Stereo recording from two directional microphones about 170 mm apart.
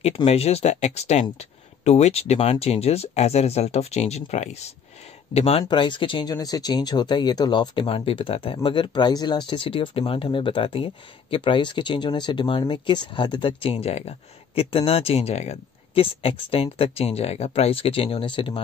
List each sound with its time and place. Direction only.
0.0 s speech: 35° left (ahead or behind)